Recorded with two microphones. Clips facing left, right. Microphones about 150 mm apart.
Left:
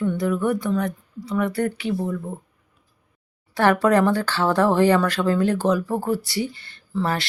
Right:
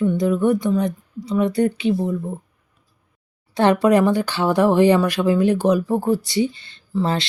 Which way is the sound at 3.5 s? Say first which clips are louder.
Right 2 dB; 20° right (ahead or behind).